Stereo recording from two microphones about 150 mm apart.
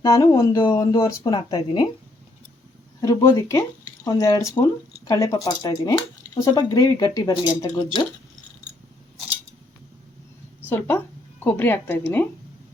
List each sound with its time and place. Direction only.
0.0 s speech: 20° left (ahead or behind)
3.0 s speech: 20° left (ahead or behind)
10.7 s speech: 15° left (ahead or behind)